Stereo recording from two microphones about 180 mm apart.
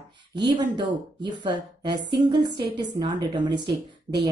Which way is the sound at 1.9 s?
70° right (ahead or behind).